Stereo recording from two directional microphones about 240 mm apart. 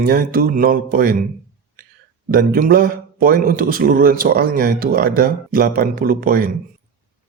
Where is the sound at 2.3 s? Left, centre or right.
Right.